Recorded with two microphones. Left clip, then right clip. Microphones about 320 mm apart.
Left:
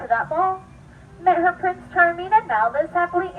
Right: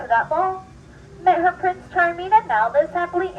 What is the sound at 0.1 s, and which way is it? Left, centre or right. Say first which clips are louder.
A woman's voice: right 1 dB; centre.